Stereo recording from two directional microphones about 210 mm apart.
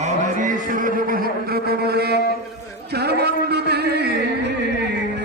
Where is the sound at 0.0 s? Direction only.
35° right (ahead or behind); by 3.3 s 50° right (ahead or behind).